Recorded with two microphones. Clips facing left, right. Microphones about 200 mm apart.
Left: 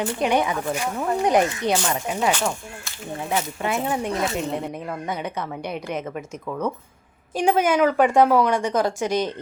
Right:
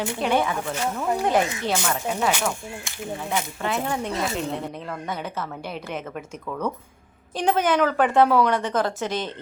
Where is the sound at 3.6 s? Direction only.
10° left (ahead or behind).